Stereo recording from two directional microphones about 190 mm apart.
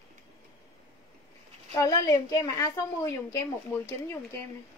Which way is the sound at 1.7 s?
20° left (ahead or behind).